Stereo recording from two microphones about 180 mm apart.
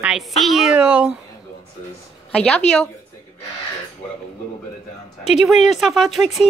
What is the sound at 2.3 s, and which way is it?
Speech, 5° left (ahead or behind).